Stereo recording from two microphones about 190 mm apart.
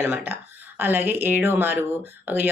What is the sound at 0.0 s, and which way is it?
Speech, 10° right (ahead or behind).